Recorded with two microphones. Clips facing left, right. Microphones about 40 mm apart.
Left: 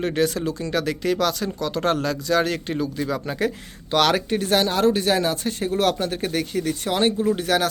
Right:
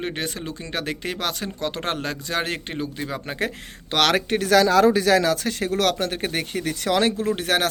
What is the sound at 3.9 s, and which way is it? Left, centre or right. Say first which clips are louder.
Speech: left 1 dB; right.